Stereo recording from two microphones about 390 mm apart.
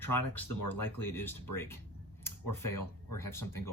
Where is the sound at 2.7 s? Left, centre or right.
Left.